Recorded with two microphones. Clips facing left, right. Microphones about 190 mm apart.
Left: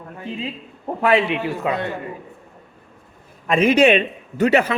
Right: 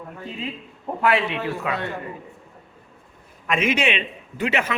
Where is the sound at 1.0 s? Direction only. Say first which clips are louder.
Left 4 dB; 20° left (ahead or behind).